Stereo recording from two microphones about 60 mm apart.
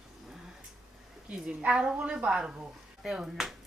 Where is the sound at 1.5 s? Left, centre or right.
Centre.